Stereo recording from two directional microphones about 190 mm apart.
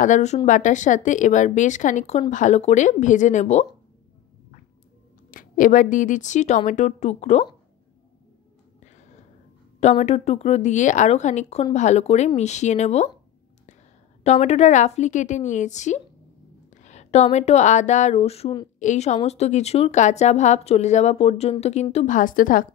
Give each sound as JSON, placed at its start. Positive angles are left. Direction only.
{"t": 0.0, "sound": "speech", "side_deg": 40}
{"t": 5.3, "sound": "speech", "side_deg": 45}
{"t": 9.8, "sound": "speech", "side_deg": 35}
{"t": 14.2, "sound": "a woman's voice", "side_deg": 35}